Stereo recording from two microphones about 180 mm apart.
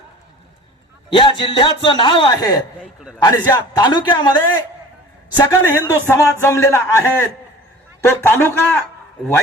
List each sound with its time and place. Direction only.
1.1 s a man's voice: 25° left (ahead or behind)
5.4 s a man's voice: 10° left (ahead or behind)